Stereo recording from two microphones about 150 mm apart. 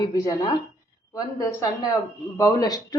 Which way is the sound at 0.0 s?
25° left (ahead or behind).